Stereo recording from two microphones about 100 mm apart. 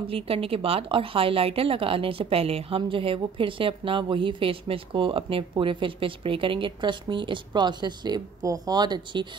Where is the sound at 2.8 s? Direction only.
60° right (ahead or behind).